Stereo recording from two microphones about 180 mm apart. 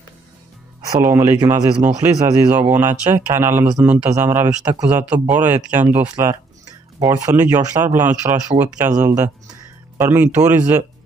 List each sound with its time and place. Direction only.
0.8 s speech: 15° right (ahead or behind)